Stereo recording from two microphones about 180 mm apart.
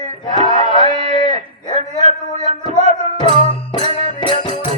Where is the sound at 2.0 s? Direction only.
40° right (ahead or behind).